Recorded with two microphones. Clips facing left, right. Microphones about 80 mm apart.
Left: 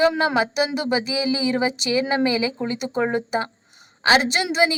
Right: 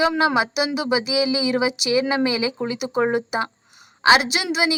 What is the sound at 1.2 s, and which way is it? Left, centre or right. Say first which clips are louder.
Speech: right 2 dB; left.